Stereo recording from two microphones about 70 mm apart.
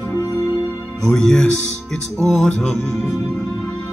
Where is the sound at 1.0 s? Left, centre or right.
Centre.